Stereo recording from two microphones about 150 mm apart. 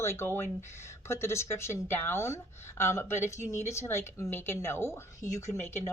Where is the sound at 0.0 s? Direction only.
15° left (ahead or behind).